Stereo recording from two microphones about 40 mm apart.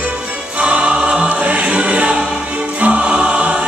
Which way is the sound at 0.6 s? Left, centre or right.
Right.